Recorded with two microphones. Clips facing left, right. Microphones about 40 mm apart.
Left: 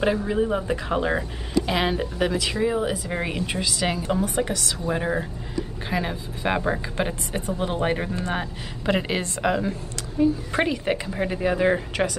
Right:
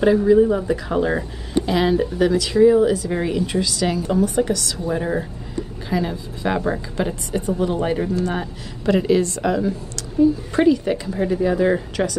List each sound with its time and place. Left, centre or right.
0.3 s speech: centre
3.3 s speech: left